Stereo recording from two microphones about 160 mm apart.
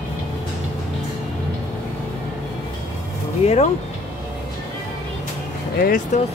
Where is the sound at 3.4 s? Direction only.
40° left (ahead or behind).